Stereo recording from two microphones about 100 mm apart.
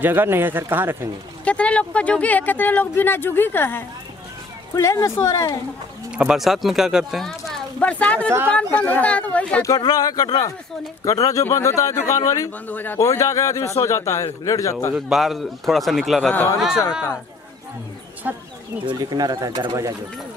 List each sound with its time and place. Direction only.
0.0 s speech: 20° right (ahead or behind)
1.4 s speech: 10° left (ahead or behind); by 5.6 s 35° left (ahead or behind)
6.1 s speech: 5° right (ahead or behind)
7.8 s speech: 15° left (ahead or behind)
9.8 s speech: 40° left (ahead or behind)
12.6 s speech: 20° left (ahead or behind)
13.0 s speech: 30° left (ahead or behind)
15.0 s speech: 5° right (ahead or behind)
18.9 s speech: 45° right (ahead or behind)